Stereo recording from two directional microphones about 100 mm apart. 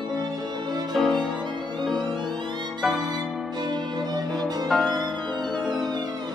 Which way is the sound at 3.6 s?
45° right (ahead or behind).